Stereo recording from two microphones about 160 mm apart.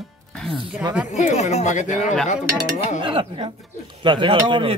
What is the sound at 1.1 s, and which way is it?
Speech, 45° left (ahead or behind).